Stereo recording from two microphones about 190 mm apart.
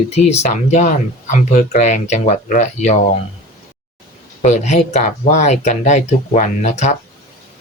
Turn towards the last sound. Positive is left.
turn(degrees=40)  # may be behind; listen again after turning